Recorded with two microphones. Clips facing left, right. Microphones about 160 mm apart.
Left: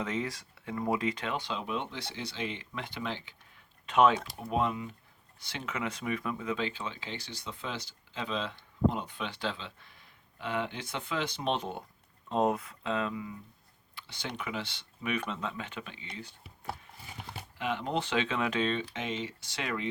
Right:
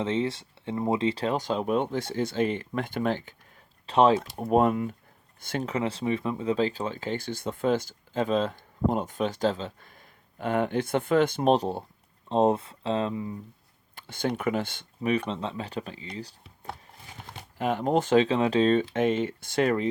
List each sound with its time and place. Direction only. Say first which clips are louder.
0.0 s speech: right 7 dB; 30° right (ahead or behind); by 3.3 s 50° right (ahead or behind)
3.8 s speech: right 4 dB; 30° right (ahead or behind)
4.4 s speech: right 9 dB; 50° right (ahead or behind); by 13.3 s 30° right (ahead or behind)
13.9 s speech: right 11 dB; 50° right (ahead or behind)
15.0 s speech: right 7 dB; 30° right (ahead or behind)
17.6 s speech: right 8 dB; 45° right (ahead or behind)
18.9 s speech: right 11 dB; 50° right (ahead or behind)